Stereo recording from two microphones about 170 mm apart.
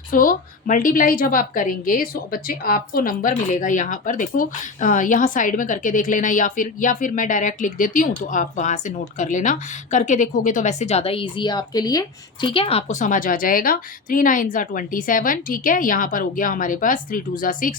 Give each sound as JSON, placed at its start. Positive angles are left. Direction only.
{"t": 0.1, "sound": "a woman's voice", "side_deg": 55}